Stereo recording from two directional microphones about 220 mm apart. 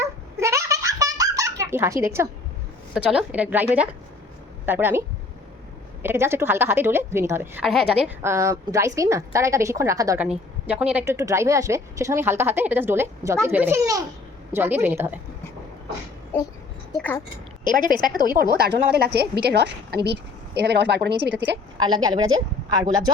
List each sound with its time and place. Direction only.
0.0 s giggle: 15° right (ahead or behind)
2.9 s a woman's voice: 5° right (ahead or behind)
8.2 s a woman's voice: 15° right (ahead or behind)
16.3 s speech: 10° left (ahead or behind)
17.9 s a woman's voice: 20° left (ahead or behind)
18.5 s speech: 45° right (ahead or behind)
21.8 s a woman's voice: 20° right (ahead or behind)